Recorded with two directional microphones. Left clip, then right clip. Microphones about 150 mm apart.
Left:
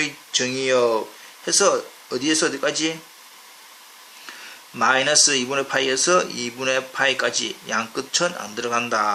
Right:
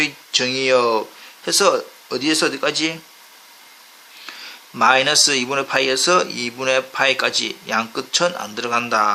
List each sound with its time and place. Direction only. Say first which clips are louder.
0.0 s speech: right 4 dB; 35° right (ahead or behind)
4.8 s speech: right 3 dB; 35° right (ahead or behind)